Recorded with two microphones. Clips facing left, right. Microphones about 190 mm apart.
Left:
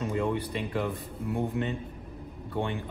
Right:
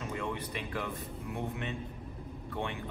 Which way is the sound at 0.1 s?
30° left (ahead or behind).